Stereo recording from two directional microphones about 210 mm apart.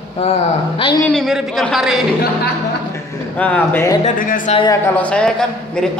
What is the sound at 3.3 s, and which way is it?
Speech, 5° left (ahead or behind).